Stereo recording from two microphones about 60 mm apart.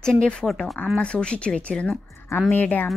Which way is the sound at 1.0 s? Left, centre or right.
Centre.